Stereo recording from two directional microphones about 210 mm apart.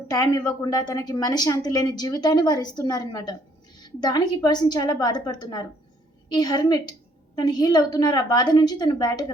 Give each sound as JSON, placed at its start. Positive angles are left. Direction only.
{"t": 0.1, "sound": "a woman's voice", "side_deg": 15}